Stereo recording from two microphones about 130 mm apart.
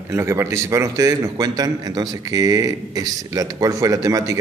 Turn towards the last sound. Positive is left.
turn(degrees=-25)  # may be behind; listen again after turning